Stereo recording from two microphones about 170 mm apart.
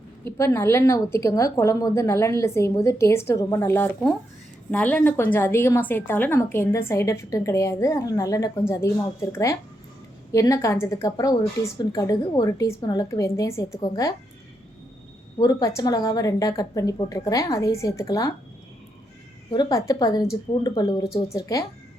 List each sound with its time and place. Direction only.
0.3 s a woman's voice: 15° left (ahead or behind)
15.4 s a woman's voice: 20° left (ahead or behind)
19.5 s a woman's voice: 25° left (ahead or behind)